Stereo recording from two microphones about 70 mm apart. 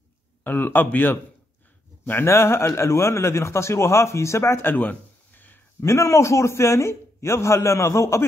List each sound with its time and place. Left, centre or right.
0.4 s a man's voice: left
4.6 s a sound: left
5.8 s a man's voice: left